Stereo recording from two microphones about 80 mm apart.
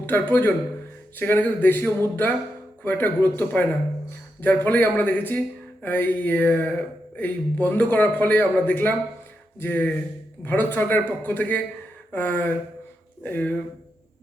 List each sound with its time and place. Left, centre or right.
0.0 s speech: left